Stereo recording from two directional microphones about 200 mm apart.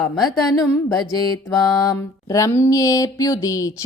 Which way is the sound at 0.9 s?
20° left (ahead or behind).